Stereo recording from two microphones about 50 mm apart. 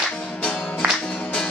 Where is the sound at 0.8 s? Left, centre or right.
Right.